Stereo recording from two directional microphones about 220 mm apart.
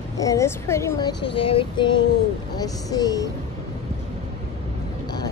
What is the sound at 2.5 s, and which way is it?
Speech, 15° left (ahead or behind).